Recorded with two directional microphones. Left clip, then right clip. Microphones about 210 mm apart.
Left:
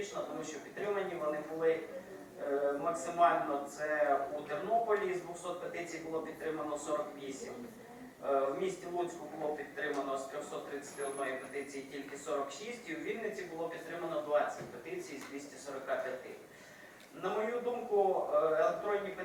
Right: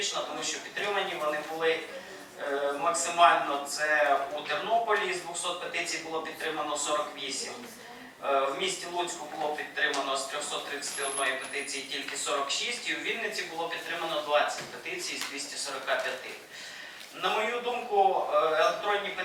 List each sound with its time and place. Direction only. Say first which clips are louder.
0.0 s a man's voice: right 8 dB; 5° left (ahead or behind)
17.2 s speech: right 7 dB; 10° left (ahead or behind)